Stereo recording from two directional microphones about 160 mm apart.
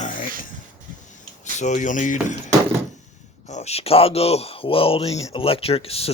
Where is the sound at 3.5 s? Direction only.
45° left (ahead or behind).